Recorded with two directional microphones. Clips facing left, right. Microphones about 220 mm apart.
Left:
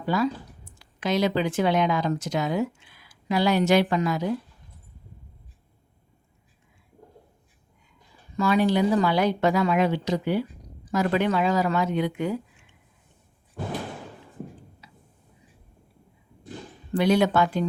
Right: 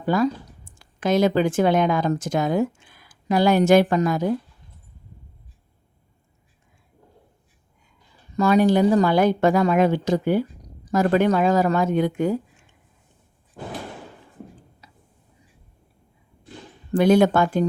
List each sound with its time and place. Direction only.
0.0 s speech: 50° right (ahead or behind)
8.4 s a woman's voice: 45° right (ahead or behind)
14.8 s tick-tock: 40° right (ahead or behind)
16.9 s a woman's voice: 50° right (ahead or behind)